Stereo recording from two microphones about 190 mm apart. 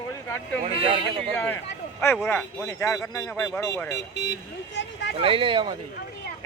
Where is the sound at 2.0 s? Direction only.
10° left (ahead or behind).